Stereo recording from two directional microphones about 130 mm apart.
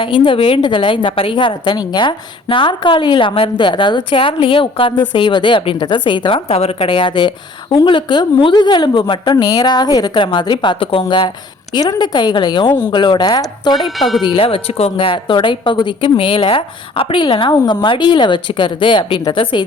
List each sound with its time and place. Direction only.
0.0 s a woman's voice: 40° left (ahead or behind)
13.8 s speech: centre (ahead or behind)
14.2 s a woman's voice: 40° left (ahead or behind)